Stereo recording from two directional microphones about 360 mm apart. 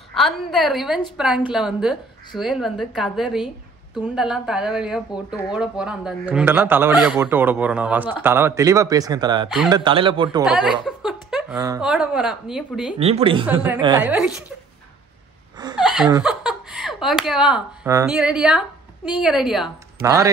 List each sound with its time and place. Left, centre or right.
0.1 s a woman's voice: centre
10.4 s a woman's voice: centre
13.0 s speech: centre
15.8 s speech: centre